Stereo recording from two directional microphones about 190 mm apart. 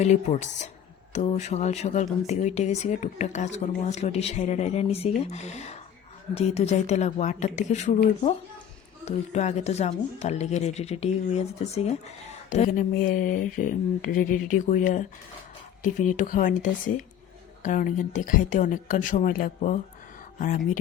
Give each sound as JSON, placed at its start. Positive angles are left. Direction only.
{"t": 0.0, "sound": "speech", "side_deg": 40}
{"t": 9.0, "sound": "speech", "side_deg": 35}
{"t": 17.6, "sound": "speech", "side_deg": 45}